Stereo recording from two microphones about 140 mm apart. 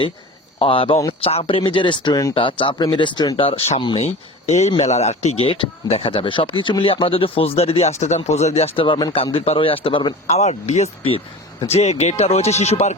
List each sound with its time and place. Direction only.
0.6 s speech: 40° left (ahead or behind)
10.2 s speech: 50° left (ahead or behind)